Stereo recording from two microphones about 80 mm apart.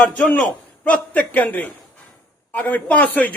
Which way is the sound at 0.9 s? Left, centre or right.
Centre.